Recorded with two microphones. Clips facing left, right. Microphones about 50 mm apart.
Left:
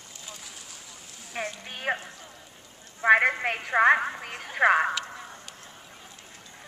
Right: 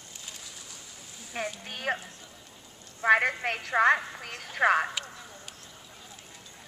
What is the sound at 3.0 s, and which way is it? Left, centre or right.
A woman's voice, centre.